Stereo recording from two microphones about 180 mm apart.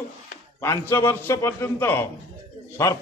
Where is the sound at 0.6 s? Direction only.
15° left (ahead or behind).